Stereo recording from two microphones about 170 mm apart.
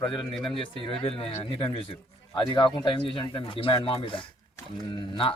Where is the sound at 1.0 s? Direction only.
35° left (ahead or behind).